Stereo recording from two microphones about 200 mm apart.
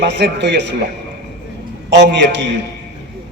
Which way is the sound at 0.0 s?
60° right (ahead or behind).